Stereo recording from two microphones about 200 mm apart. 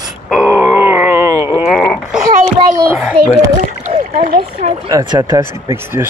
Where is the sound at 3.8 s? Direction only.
35° right (ahead or behind).